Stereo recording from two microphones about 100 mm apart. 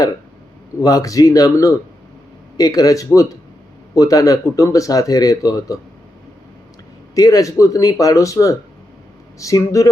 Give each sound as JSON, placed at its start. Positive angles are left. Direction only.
{"t": 0.8, "sound": "speech", "side_deg": 40}
{"t": 7.2, "sound": "speech", "side_deg": 35}